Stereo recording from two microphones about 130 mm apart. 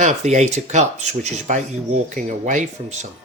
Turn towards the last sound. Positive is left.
turn(degrees=-70)  # may be behind; listen again after turning